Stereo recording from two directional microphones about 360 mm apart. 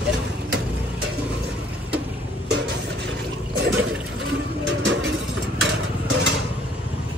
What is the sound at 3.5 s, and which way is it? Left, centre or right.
Toilet flush, right.